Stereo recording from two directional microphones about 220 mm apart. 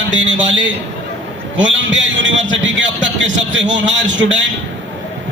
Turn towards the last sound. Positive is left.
turn(degrees=-55)  # may be behind; listen again after turning